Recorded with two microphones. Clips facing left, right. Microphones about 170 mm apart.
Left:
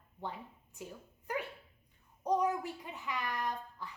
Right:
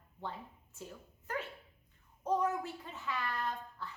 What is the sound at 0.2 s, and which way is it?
A woman's voice, 15° left (ahead or behind).